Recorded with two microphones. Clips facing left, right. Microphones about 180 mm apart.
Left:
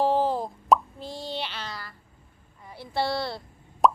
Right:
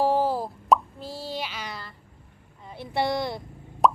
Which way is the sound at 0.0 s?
10° right (ahead or behind).